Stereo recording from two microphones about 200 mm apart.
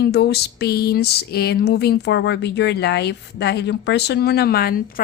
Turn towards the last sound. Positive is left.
turn(degrees=45)  # may be behind; listen again after turning